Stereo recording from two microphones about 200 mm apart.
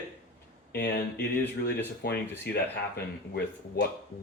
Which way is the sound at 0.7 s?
50° left (ahead or behind).